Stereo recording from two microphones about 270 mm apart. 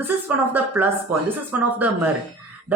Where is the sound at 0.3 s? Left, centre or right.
Centre.